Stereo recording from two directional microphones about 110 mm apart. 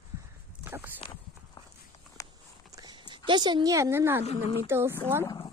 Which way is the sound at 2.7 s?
35° right (ahead or behind).